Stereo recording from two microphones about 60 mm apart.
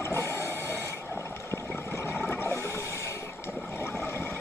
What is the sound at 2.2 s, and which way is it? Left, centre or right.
Toilet flush, left.